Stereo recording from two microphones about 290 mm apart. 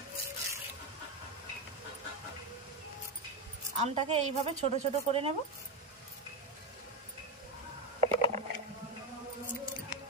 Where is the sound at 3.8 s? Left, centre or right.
Right.